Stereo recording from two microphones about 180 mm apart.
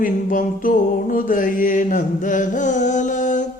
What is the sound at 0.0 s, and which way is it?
Mantra, 50° left (ahead or behind).